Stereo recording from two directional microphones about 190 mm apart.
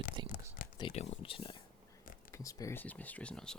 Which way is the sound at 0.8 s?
30° left (ahead or behind).